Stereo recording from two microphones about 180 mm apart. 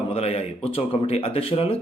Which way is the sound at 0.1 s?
35° left (ahead or behind).